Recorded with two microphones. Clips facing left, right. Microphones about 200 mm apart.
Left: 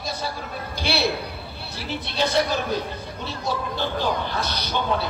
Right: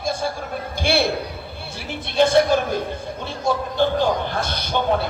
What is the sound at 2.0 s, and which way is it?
A man's voice, 50° right (ahead or behind).